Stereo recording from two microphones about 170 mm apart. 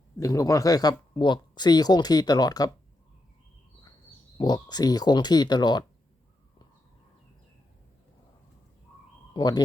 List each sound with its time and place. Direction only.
0.2 s speech: 20° left (ahead or behind)
4.4 s speech: 25° left (ahead or behind)
9.3 s speech: 25° left (ahead or behind)